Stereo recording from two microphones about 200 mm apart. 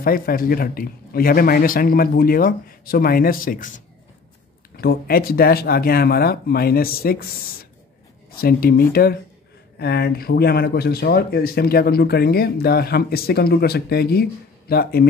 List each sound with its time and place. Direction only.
0.0 s speech: 45° left (ahead or behind)